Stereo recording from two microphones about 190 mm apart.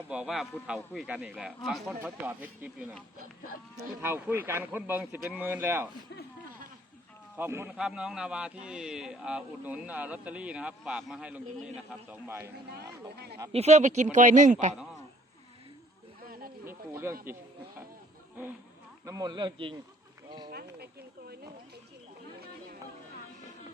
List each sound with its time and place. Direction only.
0.1 s a man's voice: 5° right (ahead or behind)
4.0 s speech: 10° right (ahead or behind)
7.3 s a man's voice: 10° right (ahead or behind)
13.5 s speech: 35° right (ahead or behind)
16.2 s a sound: 50° right (ahead or behind)
16.6 s speech: 10° right (ahead or behind)
19.0 s a man's voice: 20° right (ahead or behind)
20.5 s speech: 55° right (ahead or behind)